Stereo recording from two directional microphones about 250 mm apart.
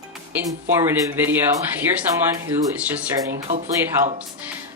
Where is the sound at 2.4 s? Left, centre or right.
Centre.